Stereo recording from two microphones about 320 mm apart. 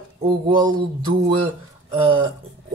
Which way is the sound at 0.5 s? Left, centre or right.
Centre.